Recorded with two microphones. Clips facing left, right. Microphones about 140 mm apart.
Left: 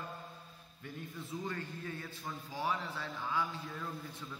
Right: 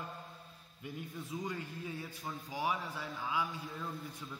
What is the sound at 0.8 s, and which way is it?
A man's voice, 15° right (ahead or behind).